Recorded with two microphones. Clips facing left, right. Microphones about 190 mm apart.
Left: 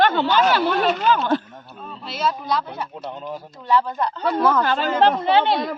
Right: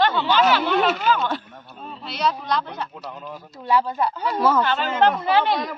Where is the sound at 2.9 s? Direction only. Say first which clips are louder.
Left 4 dB; 30° left (ahead or behind).